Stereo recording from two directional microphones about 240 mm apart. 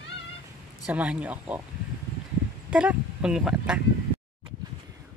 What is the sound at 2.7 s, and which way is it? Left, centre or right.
Speech, centre.